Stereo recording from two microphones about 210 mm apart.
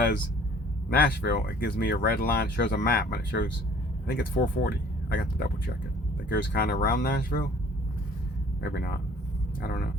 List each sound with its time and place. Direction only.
0.9 s speech: 45° left (ahead or behind)
6.3 s speech: 50° left (ahead or behind)
8.6 s speech: 50° left (ahead or behind)